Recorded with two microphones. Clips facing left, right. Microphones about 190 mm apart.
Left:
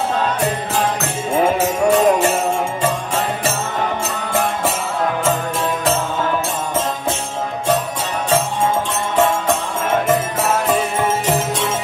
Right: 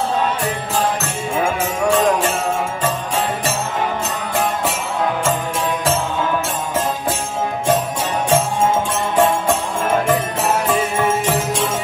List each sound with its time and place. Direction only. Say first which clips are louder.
1.4 s music: left 4 dB; 10° left (ahead or behind)